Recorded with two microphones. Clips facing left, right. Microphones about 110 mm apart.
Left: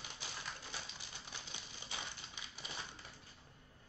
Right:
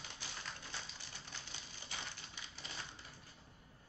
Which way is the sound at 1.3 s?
20° left (ahead or behind).